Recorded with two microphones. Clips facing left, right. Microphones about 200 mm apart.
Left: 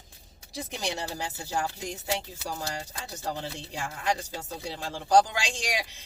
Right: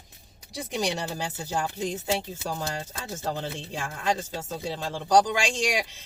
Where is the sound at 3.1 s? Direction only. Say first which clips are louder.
Right 4 dB; 20° right (ahead or behind).